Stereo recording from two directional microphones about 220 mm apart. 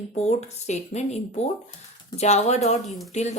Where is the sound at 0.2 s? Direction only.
30° left (ahead or behind).